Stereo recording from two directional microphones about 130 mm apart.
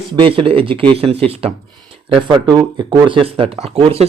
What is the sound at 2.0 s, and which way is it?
Speech, 40° right (ahead or behind).